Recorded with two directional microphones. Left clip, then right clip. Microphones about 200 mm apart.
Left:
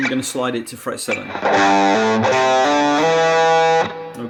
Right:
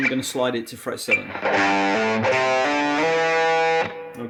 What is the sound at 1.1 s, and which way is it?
Speech, 45° left (ahead or behind).